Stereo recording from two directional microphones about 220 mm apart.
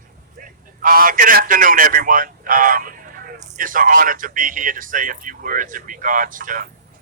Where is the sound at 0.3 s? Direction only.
40° right (ahead or behind).